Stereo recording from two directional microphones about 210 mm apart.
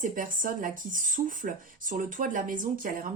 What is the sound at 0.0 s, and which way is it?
Speech, 40° right (ahead or behind).